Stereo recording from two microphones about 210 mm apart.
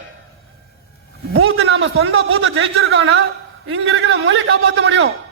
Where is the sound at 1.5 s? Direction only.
70° right (ahead or behind).